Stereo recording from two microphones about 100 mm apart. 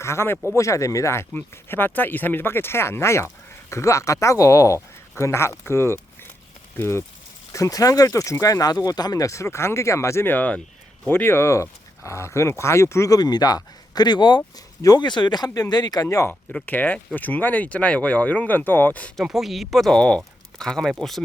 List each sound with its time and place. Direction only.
0.0 s speech: 25° left (ahead or behind); by 16.0 s 45° left (ahead or behind)
16.0 s speech: 30° left (ahead or behind)
16.5 s speech: 15° left (ahead or behind)
19.1 s speech: 5° right (ahead or behind)